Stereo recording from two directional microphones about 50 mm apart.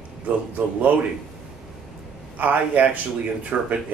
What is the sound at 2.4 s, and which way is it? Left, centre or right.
Speech, right.